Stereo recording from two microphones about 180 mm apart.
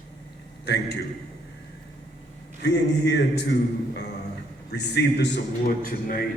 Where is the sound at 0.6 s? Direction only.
70° left (ahead or behind).